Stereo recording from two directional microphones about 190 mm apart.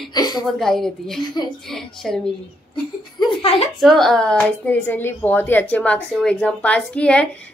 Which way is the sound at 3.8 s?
Centre (ahead or behind).